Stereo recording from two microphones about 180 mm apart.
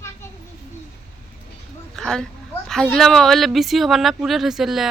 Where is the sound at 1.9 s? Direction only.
Centre (ahead or behind).